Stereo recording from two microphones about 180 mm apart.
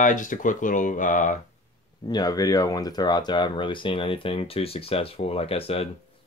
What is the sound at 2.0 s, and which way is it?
Speech, 20° left (ahead or behind).